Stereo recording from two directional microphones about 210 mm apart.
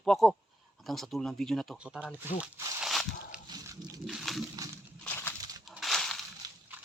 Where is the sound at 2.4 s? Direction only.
5° right (ahead or behind).